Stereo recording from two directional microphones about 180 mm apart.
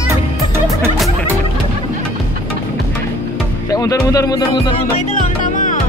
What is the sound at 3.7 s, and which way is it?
Music, 20° left (ahead or behind).